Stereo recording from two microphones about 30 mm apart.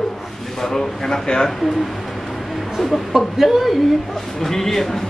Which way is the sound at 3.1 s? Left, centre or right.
Centre.